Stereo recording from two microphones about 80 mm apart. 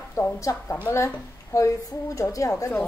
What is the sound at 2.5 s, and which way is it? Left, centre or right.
Speech, left.